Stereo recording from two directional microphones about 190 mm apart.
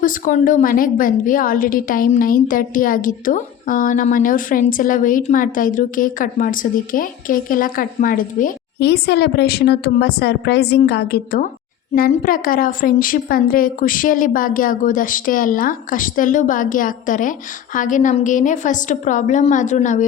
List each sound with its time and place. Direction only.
0.0 s a woman's voice: 45° left (ahead or behind)